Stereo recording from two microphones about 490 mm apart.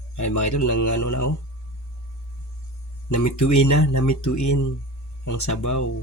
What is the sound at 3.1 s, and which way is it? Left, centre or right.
Speech, left.